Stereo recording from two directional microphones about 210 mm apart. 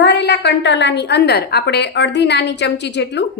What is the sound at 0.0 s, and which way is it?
A woman's voice, 55° left (ahead or behind).